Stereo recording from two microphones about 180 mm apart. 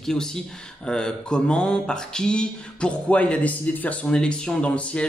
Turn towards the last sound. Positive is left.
turn(degrees=5)  # may be behind; listen again after turning